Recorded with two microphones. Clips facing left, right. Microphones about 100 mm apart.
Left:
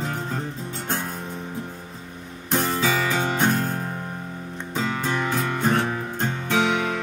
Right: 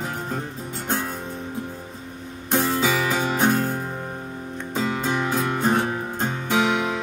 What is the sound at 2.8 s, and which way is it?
Music, 10° right (ahead or behind).